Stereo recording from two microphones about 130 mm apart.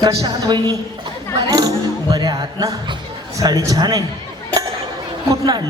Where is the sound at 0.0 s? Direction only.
25° right (ahead or behind).